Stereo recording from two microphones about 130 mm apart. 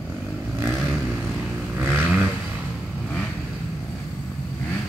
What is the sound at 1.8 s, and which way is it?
Vehicle, 15° right (ahead or behind).